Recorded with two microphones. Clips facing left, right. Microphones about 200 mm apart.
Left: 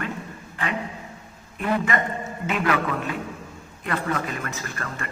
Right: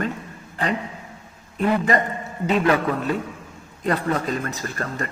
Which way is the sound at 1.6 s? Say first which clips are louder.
Right 4 dB; 35° right (ahead or behind).